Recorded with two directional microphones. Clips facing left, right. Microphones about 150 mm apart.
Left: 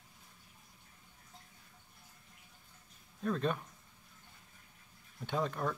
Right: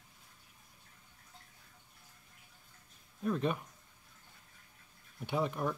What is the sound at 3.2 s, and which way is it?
Speech, 10° right (ahead or behind).